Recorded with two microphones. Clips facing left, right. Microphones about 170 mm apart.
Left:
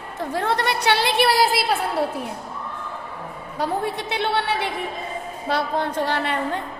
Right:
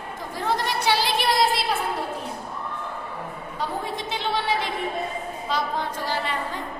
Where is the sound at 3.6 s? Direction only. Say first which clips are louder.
Left 5 dB; 65° left (ahead or behind).